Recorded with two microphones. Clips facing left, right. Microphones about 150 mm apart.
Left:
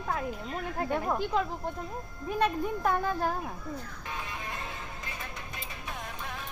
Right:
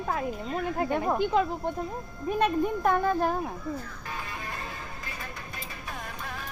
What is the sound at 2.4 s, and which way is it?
Speech, 10° right (ahead or behind).